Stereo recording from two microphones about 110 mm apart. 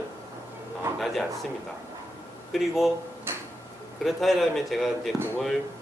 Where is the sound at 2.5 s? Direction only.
Centre (ahead or behind).